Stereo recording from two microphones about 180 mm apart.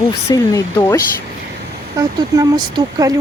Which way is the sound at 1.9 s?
20° right (ahead or behind).